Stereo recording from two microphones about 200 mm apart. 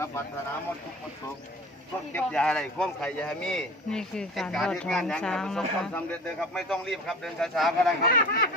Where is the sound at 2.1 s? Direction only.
5° left (ahead or behind).